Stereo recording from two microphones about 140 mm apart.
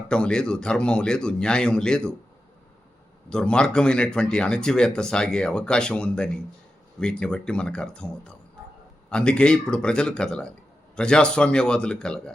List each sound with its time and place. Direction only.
0.1 s speech: 5° left (ahead or behind)
3.2 s speech: 5° left (ahead or behind)